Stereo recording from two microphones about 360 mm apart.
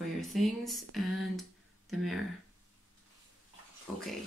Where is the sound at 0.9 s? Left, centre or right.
Centre.